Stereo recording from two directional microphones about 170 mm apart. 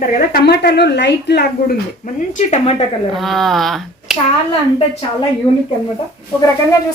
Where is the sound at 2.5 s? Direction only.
40° left (ahead or behind).